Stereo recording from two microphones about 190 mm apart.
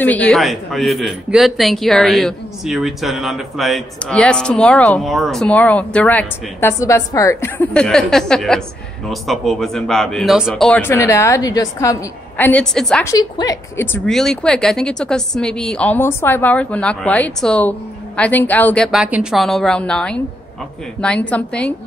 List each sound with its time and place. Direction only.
0.0 s a man's voice: 10° left (ahead or behind)
13.0 s a woman's voice: 20° left (ahead or behind)
18.9 s a man's voice: 5° right (ahead or behind)